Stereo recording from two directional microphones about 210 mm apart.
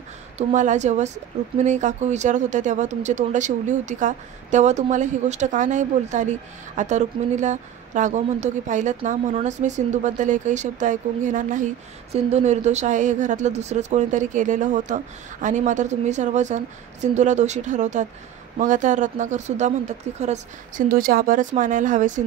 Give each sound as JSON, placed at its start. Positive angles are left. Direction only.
{"t": 0.4, "sound": "a woman's voice", "side_deg": -35}